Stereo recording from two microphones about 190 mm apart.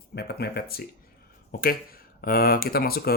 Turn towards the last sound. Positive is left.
turn(degrees=55)  # may be behind; listen again after turning